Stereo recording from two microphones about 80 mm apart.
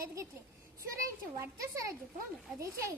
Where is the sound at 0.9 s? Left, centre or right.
Right.